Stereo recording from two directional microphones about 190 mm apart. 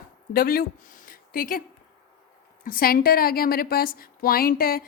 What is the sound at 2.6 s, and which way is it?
Speech, 50° left (ahead or behind).